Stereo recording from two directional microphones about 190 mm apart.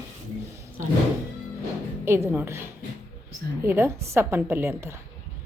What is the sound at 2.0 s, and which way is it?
A woman's voice, 10° right (ahead or behind).